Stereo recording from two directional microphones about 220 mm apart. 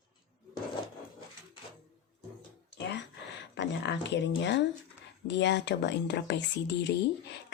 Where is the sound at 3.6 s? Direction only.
50° left (ahead or behind).